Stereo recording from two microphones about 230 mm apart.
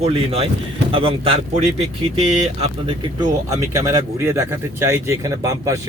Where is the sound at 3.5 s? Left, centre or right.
Centre.